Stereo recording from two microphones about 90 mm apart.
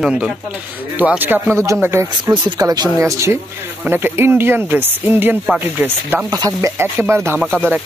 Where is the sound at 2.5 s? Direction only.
45° right (ahead or behind).